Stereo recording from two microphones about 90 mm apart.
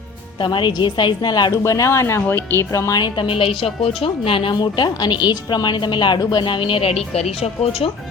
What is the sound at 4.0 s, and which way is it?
Music, 80° left.